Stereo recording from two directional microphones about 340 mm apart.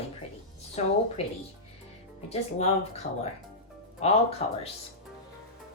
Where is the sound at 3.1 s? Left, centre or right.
Left.